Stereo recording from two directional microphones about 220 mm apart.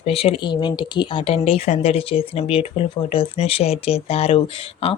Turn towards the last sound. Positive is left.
turn(degrees=25)  # may be behind; listen again after turning